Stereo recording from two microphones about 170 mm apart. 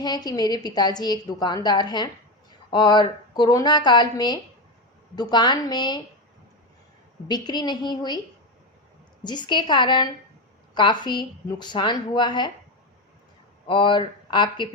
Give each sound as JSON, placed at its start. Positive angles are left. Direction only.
{"t": 0.0, "sound": "a woman's voice", "side_deg": 25}
{"t": 7.3, "sound": "a woman's voice", "side_deg": 25}
{"t": 9.2, "sound": "a woman's voice", "side_deg": 25}
{"t": 13.7, "sound": "a woman's voice", "side_deg": 30}